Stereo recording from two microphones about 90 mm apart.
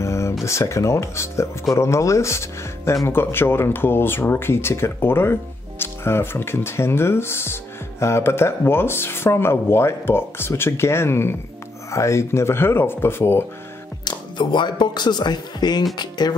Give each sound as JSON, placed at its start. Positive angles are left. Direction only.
{"t": 0.0, "sound": "a sound", "side_deg": 30}
{"t": 0.5, "sound": "speech", "side_deg": 30}
{"t": 14.0, "sound": "speech", "side_deg": 55}